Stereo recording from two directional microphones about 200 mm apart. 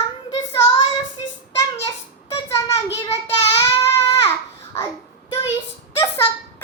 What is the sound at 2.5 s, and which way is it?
Child singing, 15° left (ahead or behind).